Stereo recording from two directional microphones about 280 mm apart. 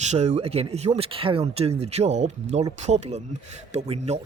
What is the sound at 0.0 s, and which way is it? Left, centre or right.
Speech, right.